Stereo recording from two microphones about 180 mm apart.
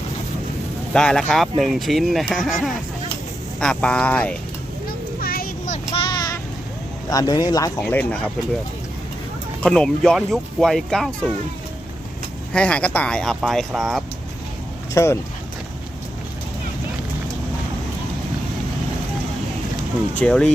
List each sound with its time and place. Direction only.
0.9 s speech: 5° left (ahead or behind)
5.2 s child singing: 55° left (ahead or behind); by 6.4 s 20° left (ahead or behind)
7.1 s speech: 20° left (ahead or behind)
7.8 s speech: 10° left (ahead or behind)
9.6 s speech: 5° left (ahead or behind)
12.5 s speech: 5° left (ahead or behind)
14.9 s speech: 15° left (ahead or behind)
20.1 s speech: 5° left (ahead or behind)